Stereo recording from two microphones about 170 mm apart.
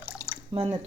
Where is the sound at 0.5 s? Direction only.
35° right (ahead or behind).